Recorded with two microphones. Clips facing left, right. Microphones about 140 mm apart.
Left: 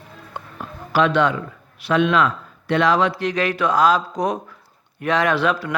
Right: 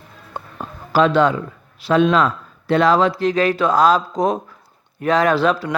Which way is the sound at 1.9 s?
35° right (ahead or behind).